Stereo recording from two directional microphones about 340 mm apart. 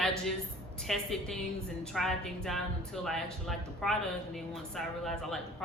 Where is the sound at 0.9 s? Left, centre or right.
Centre.